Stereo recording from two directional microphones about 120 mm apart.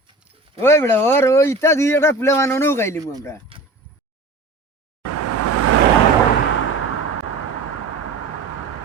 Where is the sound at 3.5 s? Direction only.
50° right (ahead or behind).